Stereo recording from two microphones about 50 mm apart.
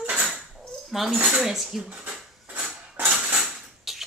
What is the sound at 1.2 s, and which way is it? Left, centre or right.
Dishes, centre.